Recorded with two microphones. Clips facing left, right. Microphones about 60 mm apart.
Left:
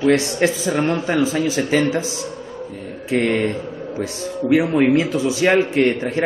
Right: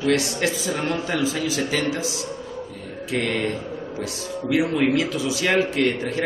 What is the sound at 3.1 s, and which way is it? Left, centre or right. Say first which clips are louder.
Speech: left 6 dB; left.